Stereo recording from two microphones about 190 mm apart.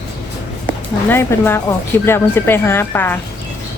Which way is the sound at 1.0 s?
10° left (ahead or behind).